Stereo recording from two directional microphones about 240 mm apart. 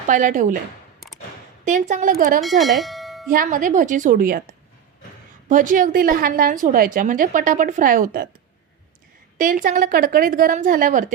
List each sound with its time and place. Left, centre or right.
0.1 s a woman's voice: right
1.6 s a woman's voice: right
2.4 s speech: centre
3.2 s a woman's voice: right
5.5 s a woman's voice: right
9.4 s a woman's voice: right